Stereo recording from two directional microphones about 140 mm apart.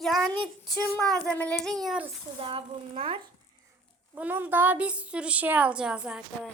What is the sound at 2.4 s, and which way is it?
Speech, 40° right (ahead or behind).